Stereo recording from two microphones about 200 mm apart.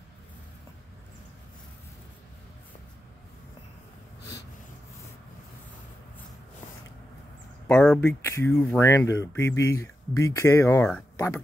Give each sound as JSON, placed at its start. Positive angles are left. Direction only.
{"t": 7.6, "sound": "speech", "side_deg": 5}